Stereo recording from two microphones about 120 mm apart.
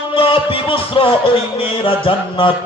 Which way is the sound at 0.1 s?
50° left (ahead or behind).